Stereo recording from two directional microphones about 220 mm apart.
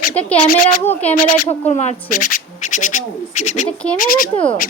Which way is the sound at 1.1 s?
35° left (ahead or behind).